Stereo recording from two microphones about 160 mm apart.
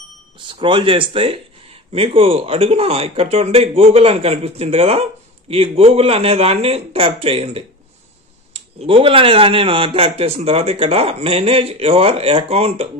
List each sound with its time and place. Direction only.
0.6 s speech: 30° right (ahead or behind)